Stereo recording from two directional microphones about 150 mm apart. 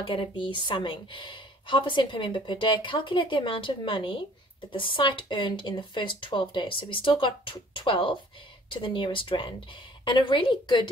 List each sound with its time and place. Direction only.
0.0 s a woman's voice: 35° left (ahead or behind)